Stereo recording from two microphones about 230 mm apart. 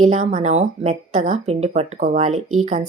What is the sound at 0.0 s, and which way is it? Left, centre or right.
Speech, right.